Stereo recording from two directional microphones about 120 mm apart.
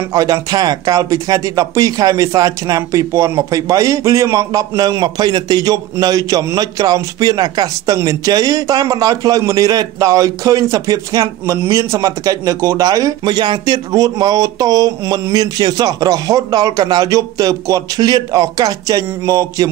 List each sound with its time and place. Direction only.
0.1 s speech: 30° right (ahead or behind)